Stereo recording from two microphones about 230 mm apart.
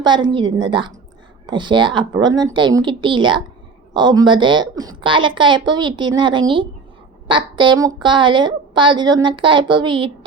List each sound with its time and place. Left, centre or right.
0.0 s a woman's voice: centre